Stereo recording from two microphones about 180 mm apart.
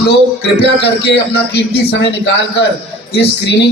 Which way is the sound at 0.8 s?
65° left (ahead or behind).